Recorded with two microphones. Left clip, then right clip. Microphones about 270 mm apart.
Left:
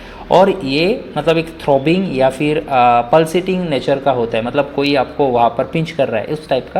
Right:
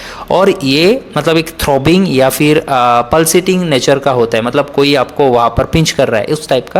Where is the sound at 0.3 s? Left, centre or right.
Right.